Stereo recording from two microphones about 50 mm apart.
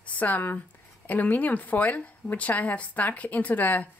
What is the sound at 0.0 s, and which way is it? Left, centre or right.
Speech, left.